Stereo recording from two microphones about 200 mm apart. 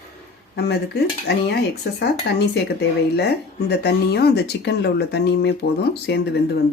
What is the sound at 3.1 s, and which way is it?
Speech, 55° left (ahead or behind).